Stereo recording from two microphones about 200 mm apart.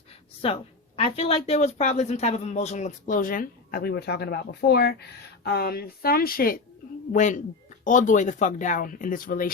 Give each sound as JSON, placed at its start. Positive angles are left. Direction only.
{"t": 0.4, "sound": "a woman's voice", "side_deg": 30}